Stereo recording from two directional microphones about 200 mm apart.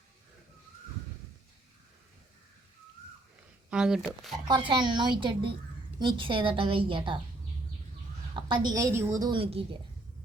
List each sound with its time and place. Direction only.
3.7 s speech: 5° right (ahead or behind)
4.4 s a woman's voice: 25° right (ahead or behind)
8.4 s a woman's voice: 20° right (ahead or behind)